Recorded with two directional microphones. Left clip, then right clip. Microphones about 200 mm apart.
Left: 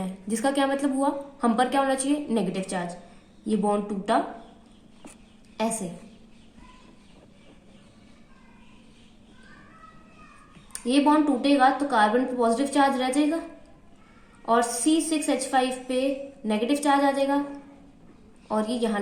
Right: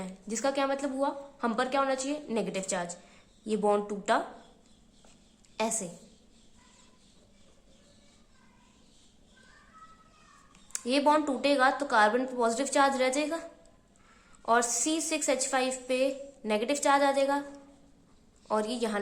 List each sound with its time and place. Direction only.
0.0 s a woman's voice: 15° right (ahead or behind)
5.6 s a woman's voice: 25° right (ahead or behind)
10.7 s a woman's voice: 25° right (ahead or behind)
14.4 s a woman's voice: 25° right (ahead or behind)
18.4 s a woman's voice: 25° right (ahead or behind)